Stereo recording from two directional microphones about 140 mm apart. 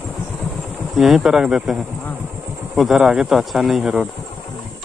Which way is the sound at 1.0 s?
5° right (ahead or behind).